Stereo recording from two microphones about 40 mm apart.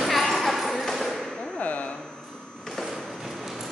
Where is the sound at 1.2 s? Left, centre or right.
Centre.